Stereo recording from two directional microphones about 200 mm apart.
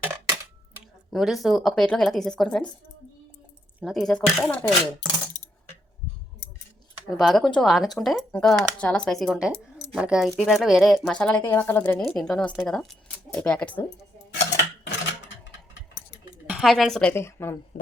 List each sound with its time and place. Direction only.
1.1 s speech: centre (ahead or behind)
3.8 s speech: centre (ahead or behind)
5.4 s coin: 40° left (ahead or behind)
7.1 s speech: centre (ahead or behind)
14.3 s cutlery: 55° left (ahead or behind)
16.5 s speech: centre (ahead or behind)